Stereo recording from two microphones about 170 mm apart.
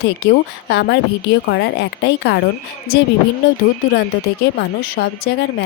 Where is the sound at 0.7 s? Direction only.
90° left.